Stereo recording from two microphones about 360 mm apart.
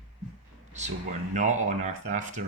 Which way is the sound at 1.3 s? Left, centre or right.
Centre.